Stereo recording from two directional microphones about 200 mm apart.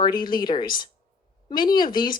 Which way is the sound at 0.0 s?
20° left (ahead or behind).